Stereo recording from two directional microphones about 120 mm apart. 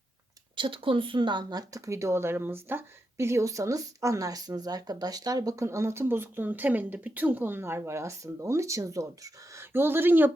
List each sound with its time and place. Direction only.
0.5 s speech: 45° right (ahead or behind); by 10.3 s 15° right (ahead or behind)